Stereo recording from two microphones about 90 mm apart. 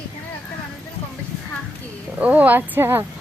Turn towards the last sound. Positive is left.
turn(degrees=-25)  # may be behind; listen again after turning